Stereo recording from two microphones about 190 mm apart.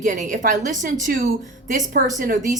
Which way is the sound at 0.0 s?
40° right (ahead or behind).